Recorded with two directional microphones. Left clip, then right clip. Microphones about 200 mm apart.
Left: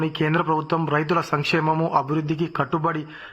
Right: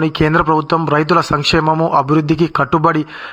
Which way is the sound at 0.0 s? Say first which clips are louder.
Right 9 dB; 25° right (ahead or behind).